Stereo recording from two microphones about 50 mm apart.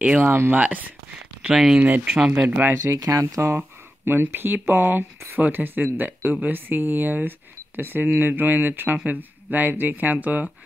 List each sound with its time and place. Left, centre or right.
0.2 s speech: right
0.6 s speech: right
1.5 s speech: centre
1.8 s speech: right
2.1 s speech: centre
2.7 s speech: right
4.0 s speech: right